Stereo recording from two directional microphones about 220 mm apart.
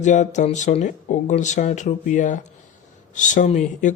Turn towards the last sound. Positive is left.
turn(degrees=35)  # may be behind; listen again after turning